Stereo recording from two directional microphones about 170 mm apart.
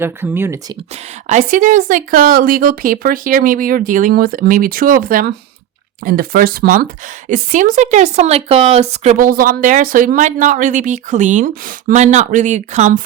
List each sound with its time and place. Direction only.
0.0 s speech: 15° right (ahead or behind)
1.3 s a woman's voice: 50° right (ahead or behind)
9.1 s a woman's voice: 55° right (ahead or behind)